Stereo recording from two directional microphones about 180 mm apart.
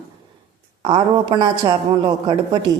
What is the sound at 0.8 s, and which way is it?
A man's voice, 25° right (ahead or behind).